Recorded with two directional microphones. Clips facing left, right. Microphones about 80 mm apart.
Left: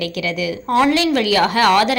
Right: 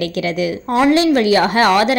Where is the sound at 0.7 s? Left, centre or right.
Centre.